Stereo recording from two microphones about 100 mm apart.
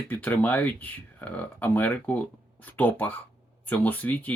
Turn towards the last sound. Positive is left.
turn(degrees=15)  # may be behind; listen again after turning